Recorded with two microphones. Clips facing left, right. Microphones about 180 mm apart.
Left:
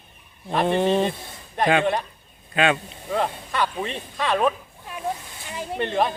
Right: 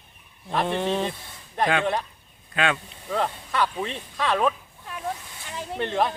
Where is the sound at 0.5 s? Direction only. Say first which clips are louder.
Left 4 dB; centre (ahead or behind).